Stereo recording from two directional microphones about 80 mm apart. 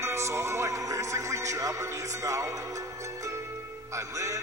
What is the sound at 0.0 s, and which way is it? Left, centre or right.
Music, right.